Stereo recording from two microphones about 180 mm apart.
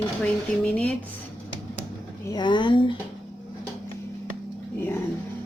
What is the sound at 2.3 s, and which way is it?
Speech, 25° left (ahead or behind).